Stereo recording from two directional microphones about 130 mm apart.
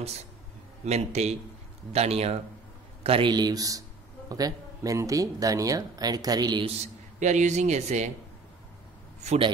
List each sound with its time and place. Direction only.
0.8 s a man's voice: 55° right (ahead or behind); by 6.7 s 35° right (ahead or behind)
6.8 s a man's voice: 65° right (ahead or behind)